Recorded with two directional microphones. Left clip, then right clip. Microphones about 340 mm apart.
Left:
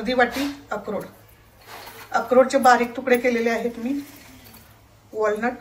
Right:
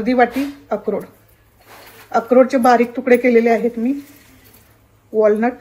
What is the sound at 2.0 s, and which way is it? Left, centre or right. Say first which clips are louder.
A woman's voice: right 4 dB; centre.